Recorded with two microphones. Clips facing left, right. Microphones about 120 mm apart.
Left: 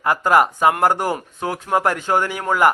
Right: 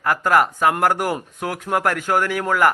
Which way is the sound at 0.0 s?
10° left (ahead or behind).